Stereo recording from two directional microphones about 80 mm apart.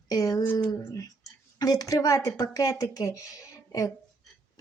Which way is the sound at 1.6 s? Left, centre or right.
Left.